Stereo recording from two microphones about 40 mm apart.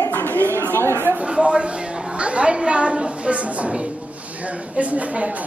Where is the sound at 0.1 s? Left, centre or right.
Left.